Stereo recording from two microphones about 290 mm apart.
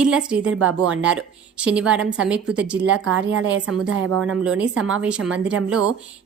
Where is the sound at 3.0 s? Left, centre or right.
Right.